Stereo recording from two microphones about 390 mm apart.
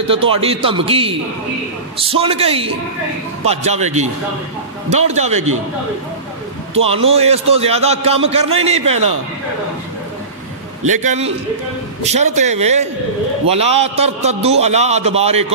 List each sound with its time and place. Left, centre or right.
0.1 s a man's voice: centre
6.8 s a man's voice: centre
10.9 s a man's voice: centre